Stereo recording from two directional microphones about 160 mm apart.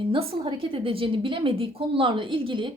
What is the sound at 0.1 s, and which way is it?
A woman's voice, 35° right (ahead or behind).